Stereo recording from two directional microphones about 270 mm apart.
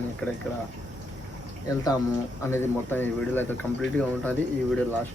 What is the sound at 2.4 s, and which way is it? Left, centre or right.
Speech, centre.